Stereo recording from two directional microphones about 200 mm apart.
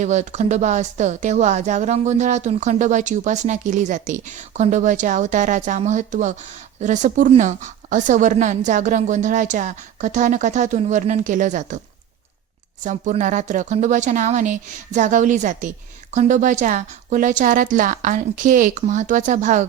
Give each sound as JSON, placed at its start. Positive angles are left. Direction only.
{"t": 0.0, "sound": "speech", "side_deg": -35}
{"t": 12.8, "sound": "speech", "side_deg": -35}